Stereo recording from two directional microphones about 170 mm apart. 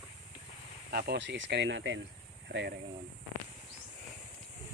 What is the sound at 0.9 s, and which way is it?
Speech, 65° right (ahead or behind).